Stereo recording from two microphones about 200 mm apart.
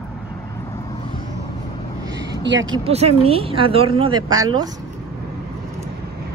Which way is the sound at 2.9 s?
30° right (ahead or behind).